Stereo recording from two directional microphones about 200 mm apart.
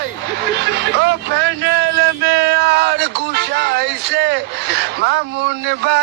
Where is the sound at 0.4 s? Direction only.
60° right (ahead or behind).